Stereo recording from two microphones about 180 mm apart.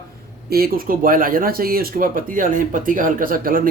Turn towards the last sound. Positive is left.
turn(degrees=-50)  # may be behind; listen again after turning